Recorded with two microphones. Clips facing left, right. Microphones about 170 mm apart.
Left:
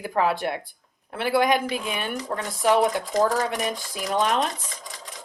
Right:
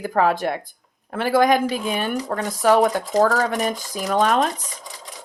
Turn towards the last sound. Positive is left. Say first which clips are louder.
# right 4 dB
turn(degrees=-40)  # may be behind; listen again after turning